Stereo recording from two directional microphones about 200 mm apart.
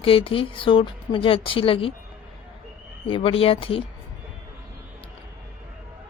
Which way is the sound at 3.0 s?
25° left (ahead or behind).